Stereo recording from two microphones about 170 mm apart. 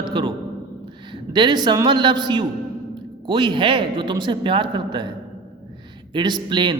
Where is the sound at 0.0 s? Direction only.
30° right (ahead or behind).